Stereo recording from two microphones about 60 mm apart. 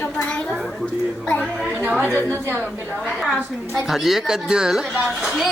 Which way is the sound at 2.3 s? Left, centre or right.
Right.